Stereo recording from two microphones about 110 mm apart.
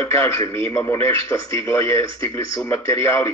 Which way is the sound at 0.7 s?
20° left (ahead or behind).